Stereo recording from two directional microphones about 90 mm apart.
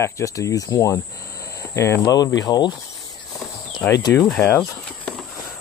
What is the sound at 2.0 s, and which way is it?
Speech, 45° left (ahead or behind).